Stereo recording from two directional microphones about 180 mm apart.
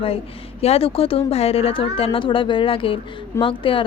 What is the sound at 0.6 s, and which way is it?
A woman's voice, 35° left (ahead or behind).